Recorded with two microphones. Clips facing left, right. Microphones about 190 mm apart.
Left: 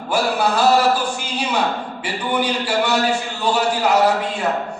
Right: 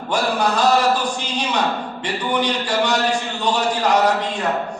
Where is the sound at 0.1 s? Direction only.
5° left (ahead or behind).